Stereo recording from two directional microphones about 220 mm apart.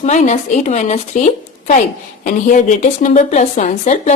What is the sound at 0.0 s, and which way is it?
Speech, 30° left (ahead or behind).